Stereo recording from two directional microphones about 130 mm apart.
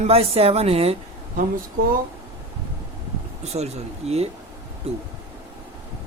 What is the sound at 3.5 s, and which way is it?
Speech, 55° right (ahead or behind).